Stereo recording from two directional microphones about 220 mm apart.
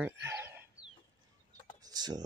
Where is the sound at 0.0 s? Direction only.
10° right (ahead or behind).